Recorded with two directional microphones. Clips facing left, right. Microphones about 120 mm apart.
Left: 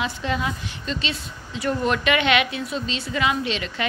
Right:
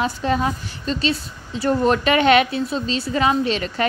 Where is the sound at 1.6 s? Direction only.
35° right (ahead or behind).